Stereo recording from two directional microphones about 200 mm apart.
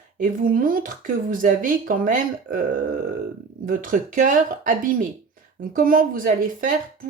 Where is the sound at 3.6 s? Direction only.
40° right (ahead or behind).